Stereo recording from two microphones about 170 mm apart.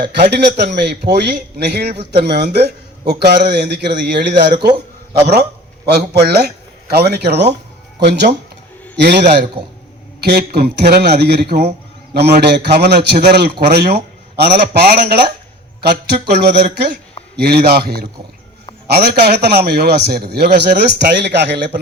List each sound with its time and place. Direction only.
0.1 s a man's voice: 75° right (ahead or behind)
7.9 s a man's voice: 85° right